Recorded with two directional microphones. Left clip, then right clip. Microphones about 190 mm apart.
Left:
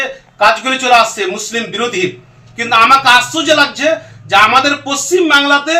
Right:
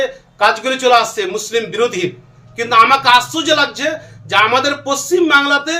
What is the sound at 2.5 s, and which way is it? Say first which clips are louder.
A man's voice: left 2 dB; 30° right (ahead or behind).